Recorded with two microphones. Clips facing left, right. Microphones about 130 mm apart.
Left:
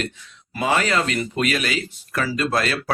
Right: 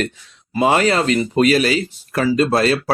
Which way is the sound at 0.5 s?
35° right (ahead or behind).